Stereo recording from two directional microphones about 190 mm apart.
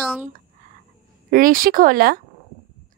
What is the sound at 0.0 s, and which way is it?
Speech, 5° right (ahead or behind).